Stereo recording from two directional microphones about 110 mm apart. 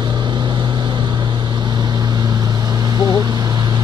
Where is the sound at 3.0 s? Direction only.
40° right (ahead or behind).